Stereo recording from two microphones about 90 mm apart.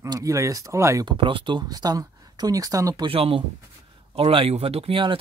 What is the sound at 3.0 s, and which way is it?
Speech, 90° right.